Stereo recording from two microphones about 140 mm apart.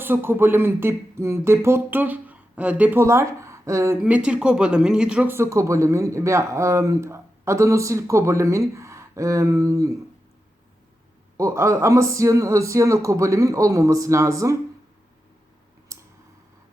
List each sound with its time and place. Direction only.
0.0 s speech: 15° right (ahead or behind)
4.0 s speech: 10° right (ahead or behind)
11.3 s speech: 20° right (ahead or behind)
15.9 s clicking: 20° right (ahead or behind)